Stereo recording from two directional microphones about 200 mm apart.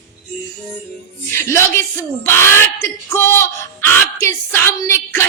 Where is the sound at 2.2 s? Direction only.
10° left (ahead or behind).